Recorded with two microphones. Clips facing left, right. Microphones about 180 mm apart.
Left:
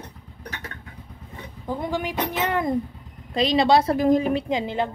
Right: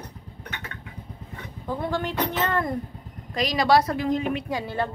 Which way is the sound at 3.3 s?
30° left (ahead or behind).